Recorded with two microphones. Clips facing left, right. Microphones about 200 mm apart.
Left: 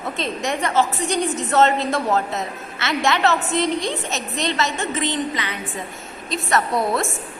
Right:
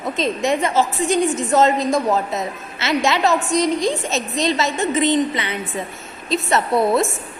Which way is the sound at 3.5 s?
20° left (ahead or behind).